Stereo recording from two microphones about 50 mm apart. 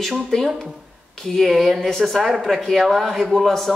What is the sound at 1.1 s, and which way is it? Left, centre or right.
Speech, centre.